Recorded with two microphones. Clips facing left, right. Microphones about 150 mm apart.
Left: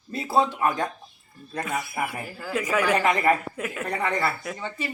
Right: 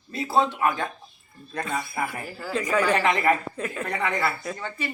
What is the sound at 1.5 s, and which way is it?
Speech, 10° left (ahead or behind).